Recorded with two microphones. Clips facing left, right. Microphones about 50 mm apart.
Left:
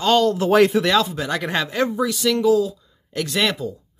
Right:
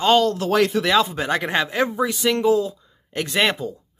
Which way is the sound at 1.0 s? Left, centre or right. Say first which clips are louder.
Right 1 dB; right.